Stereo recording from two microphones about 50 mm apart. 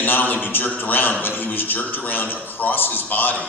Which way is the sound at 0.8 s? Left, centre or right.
Left.